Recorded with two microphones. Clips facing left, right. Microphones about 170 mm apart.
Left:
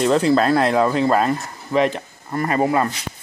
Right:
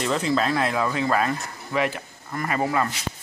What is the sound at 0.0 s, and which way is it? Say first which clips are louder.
Speech: left 7 dB; 40° left (ahead or behind).